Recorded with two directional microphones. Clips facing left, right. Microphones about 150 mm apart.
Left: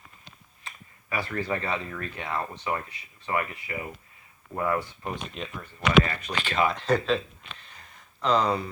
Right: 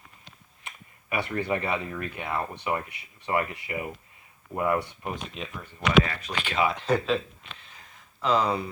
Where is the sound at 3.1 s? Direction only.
20° right (ahead or behind).